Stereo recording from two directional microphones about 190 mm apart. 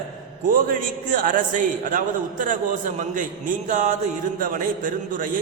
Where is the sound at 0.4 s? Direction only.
45° right (ahead or behind).